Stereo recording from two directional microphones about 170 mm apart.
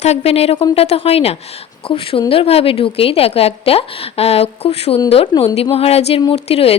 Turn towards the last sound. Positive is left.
turn(degrees=35)  # may be behind; listen again after turning